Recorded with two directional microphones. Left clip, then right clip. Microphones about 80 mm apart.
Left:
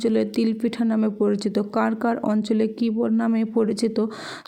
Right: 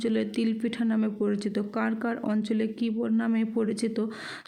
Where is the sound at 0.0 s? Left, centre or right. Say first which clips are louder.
Left 6 dB; left.